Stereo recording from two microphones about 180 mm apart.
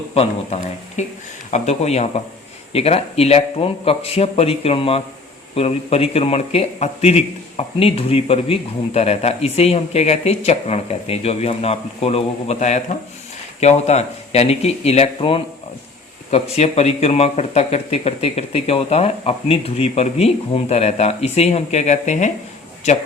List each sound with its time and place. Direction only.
0.1 s a man's voice: 35° left (ahead or behind)